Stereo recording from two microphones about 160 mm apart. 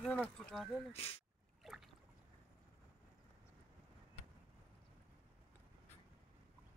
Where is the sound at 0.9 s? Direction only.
40° left (ahead or behind).